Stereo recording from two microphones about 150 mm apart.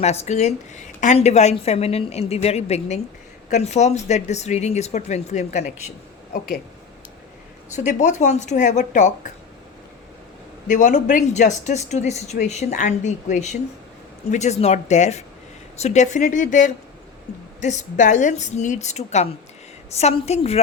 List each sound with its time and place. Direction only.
0.0 s a woman's voice: 45° left (ahead or behind)
6.3 s speech: 90° left
7.7 s a woman's voice: 55° left (ahead or behind)
10.7 s a woman's voice: 55° left (ahead or behind)